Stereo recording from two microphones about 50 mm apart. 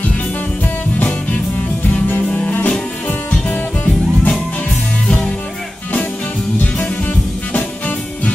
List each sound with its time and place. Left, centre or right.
2.0 s music: left